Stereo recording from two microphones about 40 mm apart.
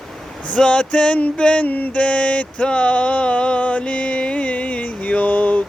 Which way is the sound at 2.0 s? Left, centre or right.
Left.